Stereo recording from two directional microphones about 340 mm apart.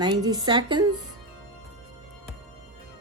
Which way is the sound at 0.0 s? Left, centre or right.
Centre.